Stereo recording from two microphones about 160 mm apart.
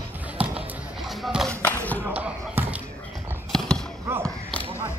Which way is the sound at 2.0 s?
10° right (ahead or behind).